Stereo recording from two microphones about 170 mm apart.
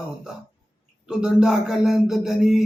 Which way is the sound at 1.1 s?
5° right (ahead or behind).